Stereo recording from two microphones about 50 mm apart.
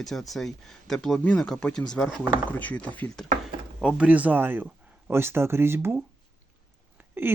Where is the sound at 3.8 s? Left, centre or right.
Right.